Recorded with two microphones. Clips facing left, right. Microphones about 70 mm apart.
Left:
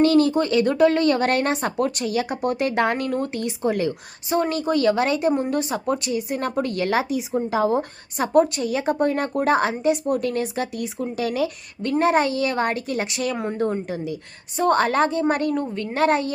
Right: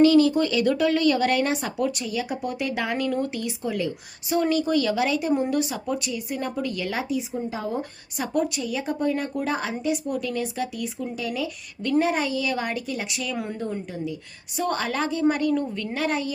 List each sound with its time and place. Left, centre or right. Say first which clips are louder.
0.0 s speech: even; left
2.0 s a woman's voice: left 5 dB; left
4.3 s a woman's voice: left 1 dB; left
8.2 s a woman's voice: left 7 dB; left
11.2 s speech: left 7 dB; left
11.9 s a child's voice: left 4 dB; left
13.3 s speech: left 4 dB; left
13.9 s speech: left 3 dB; left
14.5 s a child's voice: left 7 dB; left
15.5 s speech: left 1 dB; left
16.0 s a child's voice: left 7 dB; left